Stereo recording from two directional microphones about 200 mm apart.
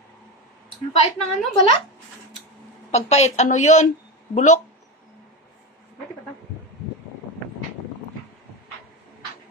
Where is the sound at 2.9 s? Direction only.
35° left (ahead or behind).